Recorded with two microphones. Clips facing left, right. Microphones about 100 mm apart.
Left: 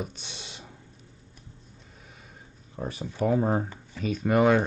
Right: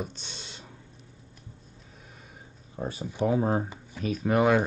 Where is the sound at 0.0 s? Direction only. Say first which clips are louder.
Even; 10° left (ahead or behind).